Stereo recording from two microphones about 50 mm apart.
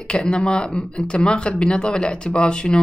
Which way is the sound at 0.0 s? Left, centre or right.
Centre.